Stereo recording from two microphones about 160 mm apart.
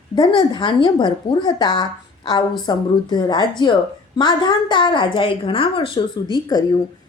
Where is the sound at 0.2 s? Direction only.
30° left (ahead or behind).